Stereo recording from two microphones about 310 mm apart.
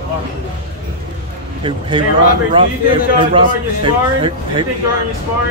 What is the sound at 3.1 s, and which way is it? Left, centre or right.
A man's voice, centre.